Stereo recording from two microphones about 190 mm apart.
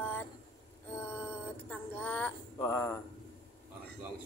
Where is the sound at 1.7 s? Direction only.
10° left (ahead or behind).